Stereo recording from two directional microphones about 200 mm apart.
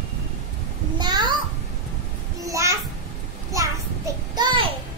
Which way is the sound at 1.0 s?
20° right (ahead or behind).